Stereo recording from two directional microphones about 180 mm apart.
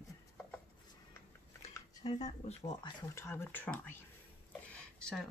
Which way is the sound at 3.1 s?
15° left (ahead or behind).